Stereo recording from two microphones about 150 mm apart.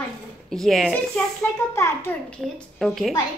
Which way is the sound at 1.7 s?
20° left (ahead or behind).